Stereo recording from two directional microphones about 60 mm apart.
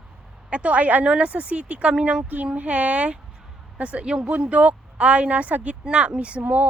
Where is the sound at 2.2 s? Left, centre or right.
Right.